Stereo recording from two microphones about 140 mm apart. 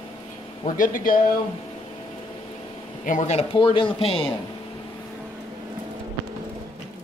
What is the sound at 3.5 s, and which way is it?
Speech, 40° left (ahead or behind).